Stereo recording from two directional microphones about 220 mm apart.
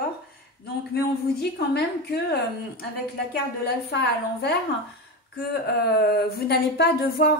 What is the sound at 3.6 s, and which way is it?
Speech, 50° left (ahead or behind).